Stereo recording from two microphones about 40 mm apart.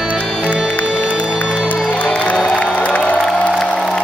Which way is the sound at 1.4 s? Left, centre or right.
Right.